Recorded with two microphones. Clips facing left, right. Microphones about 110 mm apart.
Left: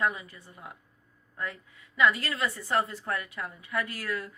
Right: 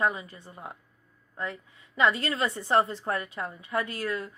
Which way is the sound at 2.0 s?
30° right (ahead or behind).